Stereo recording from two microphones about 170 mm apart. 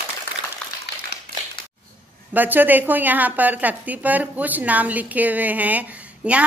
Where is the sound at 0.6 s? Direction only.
5° left (ahead or behind).